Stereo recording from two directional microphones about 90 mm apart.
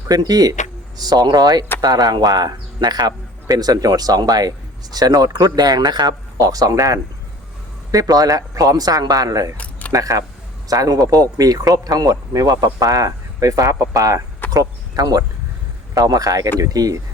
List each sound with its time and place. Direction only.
0.1 s speech: 45° right (ahead or behind)
6.4 s speech: 40° right (ahead or behind)